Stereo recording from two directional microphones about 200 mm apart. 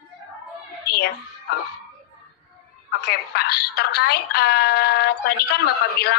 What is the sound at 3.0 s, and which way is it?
A woman's voice, 55° left (ahead or behind).